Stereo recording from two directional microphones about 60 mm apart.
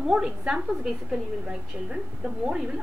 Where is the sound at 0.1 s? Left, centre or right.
Centre.